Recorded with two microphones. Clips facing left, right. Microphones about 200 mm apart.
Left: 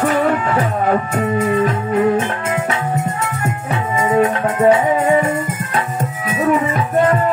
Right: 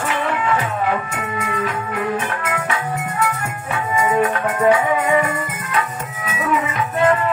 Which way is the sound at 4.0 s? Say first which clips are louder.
Left 3 dB; 25° left (ahead or behind).